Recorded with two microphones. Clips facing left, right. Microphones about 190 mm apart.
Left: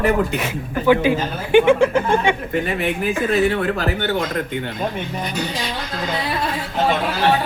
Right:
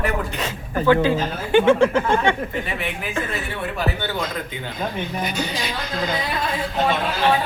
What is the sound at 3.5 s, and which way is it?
Speech, 90° left.